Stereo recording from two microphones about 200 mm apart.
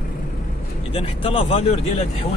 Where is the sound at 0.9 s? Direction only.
30° left (ahead or behind).